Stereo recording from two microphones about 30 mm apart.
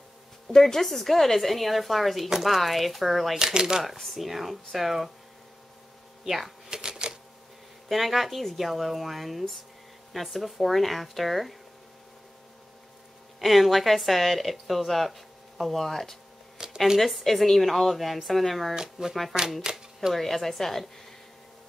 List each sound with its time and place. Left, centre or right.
0.5 s a woman's voice: centre
0.8 s a woman's voice: centre
3.4 s speech: right
3.8 s a woman's voice: centre
6.2 s speech: centre
6.7 s typewriter: right
7.9 s a woman's voice: centre
13.4 s a woman's voice: centre
16.7 s a woman's voice: centre
17.0 s a woman's voice: centre
18.8 s speech: centre
19.6 s typewriter: centre
20.2 s a woman's voice: centre